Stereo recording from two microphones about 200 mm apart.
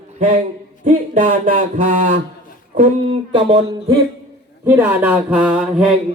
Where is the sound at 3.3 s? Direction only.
25° right (ahead or behind).